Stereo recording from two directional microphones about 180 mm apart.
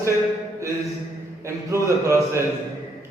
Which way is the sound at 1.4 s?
15° right (ahead or behind).